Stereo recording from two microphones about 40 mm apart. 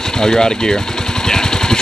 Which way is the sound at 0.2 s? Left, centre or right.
Centre.